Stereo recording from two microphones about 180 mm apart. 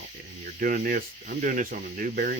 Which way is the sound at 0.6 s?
50° right (ahead or behind).